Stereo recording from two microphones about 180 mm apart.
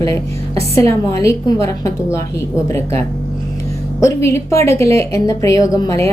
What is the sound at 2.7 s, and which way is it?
Speech, 15° left (ahead or behind).